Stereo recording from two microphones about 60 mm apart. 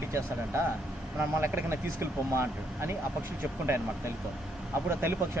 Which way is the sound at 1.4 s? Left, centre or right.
Right.